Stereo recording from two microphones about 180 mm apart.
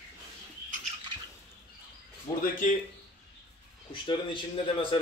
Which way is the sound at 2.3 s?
15° left (ahead or behind).